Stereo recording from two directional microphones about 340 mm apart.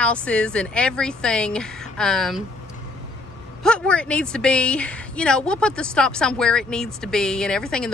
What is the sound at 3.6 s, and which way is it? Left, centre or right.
A woman's voice, centre.